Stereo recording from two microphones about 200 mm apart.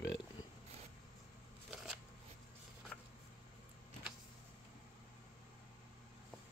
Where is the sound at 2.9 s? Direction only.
5° left (ahead or behind).